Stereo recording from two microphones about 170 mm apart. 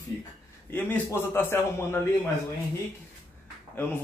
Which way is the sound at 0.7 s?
15° left (ahead or behind).